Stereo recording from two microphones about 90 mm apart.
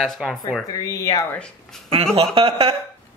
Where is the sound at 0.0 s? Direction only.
Centre (ahead or behind).